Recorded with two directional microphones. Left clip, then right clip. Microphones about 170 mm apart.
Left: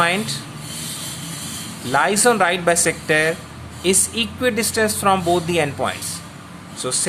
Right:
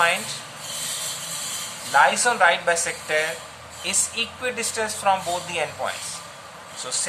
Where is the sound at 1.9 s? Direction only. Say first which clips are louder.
Left 2 dB; 55° left (ahead or behind).